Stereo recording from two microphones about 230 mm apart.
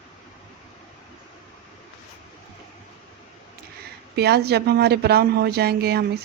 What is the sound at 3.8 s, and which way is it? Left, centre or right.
Speech, right.